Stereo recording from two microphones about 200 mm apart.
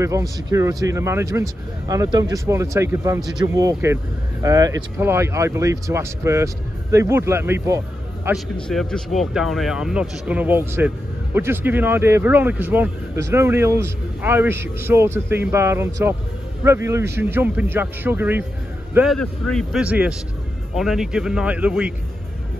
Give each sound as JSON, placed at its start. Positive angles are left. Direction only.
{"t": 0.0, "sound": "speech", "side_deg": -15}
{"t": 8.6, "sound": "speech", "side_deg": 0}
{"t": 18.9, "sound": "speech", "side_deg": 0}